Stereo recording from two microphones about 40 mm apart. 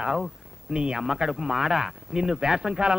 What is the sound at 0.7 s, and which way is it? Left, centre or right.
Speech, centre.